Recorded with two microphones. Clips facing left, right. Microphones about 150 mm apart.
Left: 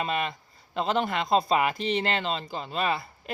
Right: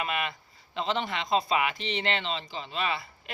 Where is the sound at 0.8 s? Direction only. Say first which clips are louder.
Left 4 dB; 45° left (ahead or behind).